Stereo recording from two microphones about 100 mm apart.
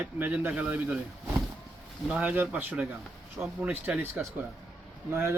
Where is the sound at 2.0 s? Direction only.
15° right (ahead or behind).